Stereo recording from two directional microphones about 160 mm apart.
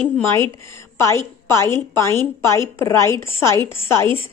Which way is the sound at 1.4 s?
15° left (ahead or behind).